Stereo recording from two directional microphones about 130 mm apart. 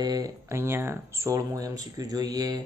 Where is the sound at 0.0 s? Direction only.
30° right (ahead or behind).